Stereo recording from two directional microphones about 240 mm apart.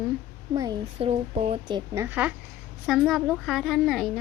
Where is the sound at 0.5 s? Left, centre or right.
Centre.